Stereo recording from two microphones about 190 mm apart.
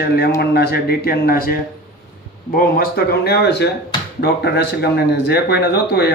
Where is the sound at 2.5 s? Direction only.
55° left (ahead or behind).